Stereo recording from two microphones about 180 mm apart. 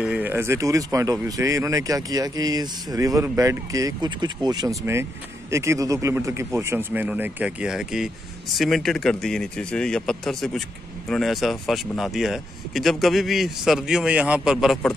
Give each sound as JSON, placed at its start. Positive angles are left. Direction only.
{"t": 0.0, "sound": "speech", "side_deg": -10}